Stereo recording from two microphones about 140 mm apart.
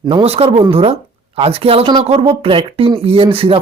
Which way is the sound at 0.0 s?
40° right (ahead or behind).